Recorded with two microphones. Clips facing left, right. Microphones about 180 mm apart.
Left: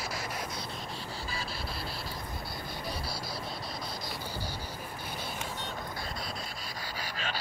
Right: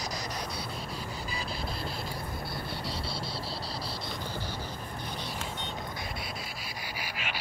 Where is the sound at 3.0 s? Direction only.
25° right (ahead or behind).